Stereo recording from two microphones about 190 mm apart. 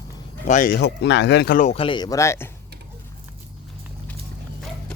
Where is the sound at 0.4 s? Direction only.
45° left (ahead or behind).